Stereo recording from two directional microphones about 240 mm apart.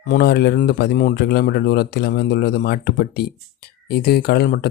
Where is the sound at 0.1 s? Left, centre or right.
Left.